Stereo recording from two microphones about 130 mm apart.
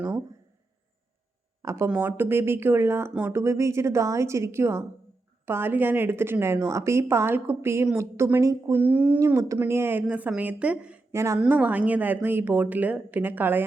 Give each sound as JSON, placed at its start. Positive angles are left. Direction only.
{"t": 1.6, "sound": "a woman's voice", "side_deg": -20}
{"t": 11.1, "sound": "a woman's voice", "side_deg": -20}